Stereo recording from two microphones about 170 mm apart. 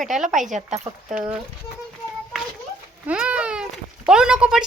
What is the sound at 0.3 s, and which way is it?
Speech, 45° right (ahead or behind).